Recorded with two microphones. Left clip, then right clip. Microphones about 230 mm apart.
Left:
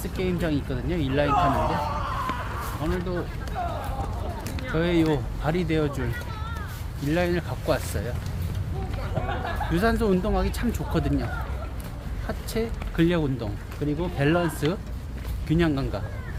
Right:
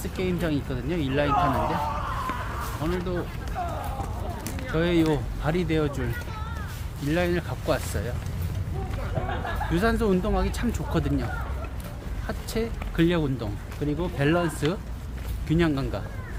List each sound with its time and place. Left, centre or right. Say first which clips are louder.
0.0 s speech: left 1 dB; centre
1.3 s speech: left 1 dB; left
2.8 s speech: even; centre
3.6 s run: left 1 dB; left
4.7 s speech: even; centre
9.7 s speech: left 1 dB; centre
12.3 s speech: left 1 dB; centre